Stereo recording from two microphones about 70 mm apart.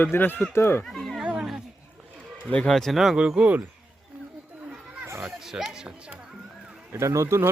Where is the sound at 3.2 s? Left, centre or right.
Centre.